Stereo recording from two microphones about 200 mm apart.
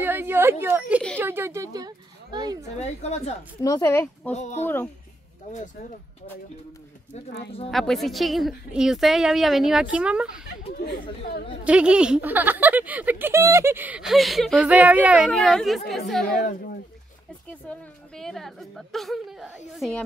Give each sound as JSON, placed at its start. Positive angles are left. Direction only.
{"t": 0.0, "sound": "a child's voice", "side_deg": -10}
{"t": 2.8, "sound": "a woman's voice", "side_deg": 35}
{"t": 3.6, "sound": "speech", "side_deg": 15}
{"t": 4.3, "sound": "a woman's voice", "side_deg": 35}
{"t": 7.7, "sound": "a woman's voice", "side_deg": 0}
{"t": 10.9, "sound": "speech", "side_deg": 50}
{"t": 11.6, "sound": "speech", "side_deg": -5}
{"t": 16.3, "sound": "speech", "side_deg": 45}
{"t": 17.5, "sound": "a woman's voice", "side_deg": 5}